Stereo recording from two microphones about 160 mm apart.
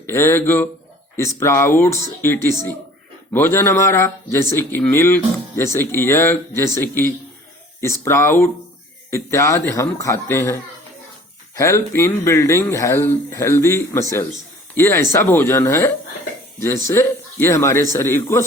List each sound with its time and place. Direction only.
0.1 s a man's voice: 15° left (ahead or behind)